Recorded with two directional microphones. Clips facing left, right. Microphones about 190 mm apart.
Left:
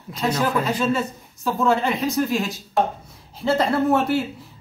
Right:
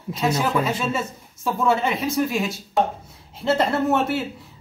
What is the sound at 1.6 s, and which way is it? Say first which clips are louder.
A man's voice: left 1 dB; centre (ahead or behind).